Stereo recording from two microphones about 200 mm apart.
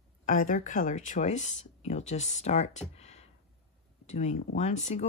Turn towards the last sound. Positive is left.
turn(degrees=35)  # may be behind; listen again after turning